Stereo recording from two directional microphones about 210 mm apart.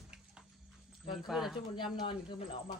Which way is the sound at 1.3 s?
Centre (ahead or behind).